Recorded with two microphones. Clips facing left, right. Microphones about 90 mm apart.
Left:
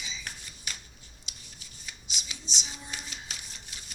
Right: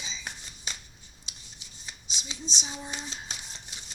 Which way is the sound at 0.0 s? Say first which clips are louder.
Right 1 dB; 25° right (ahead or behind).